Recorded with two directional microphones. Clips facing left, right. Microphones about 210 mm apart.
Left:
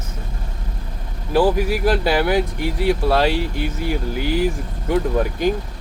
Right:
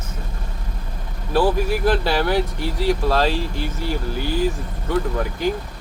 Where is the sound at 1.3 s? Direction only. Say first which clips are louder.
Left 2 dB; 10° left (ahead or behind).